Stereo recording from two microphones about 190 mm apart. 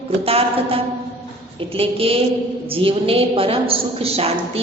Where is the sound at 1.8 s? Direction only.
30° right (ahead or behind).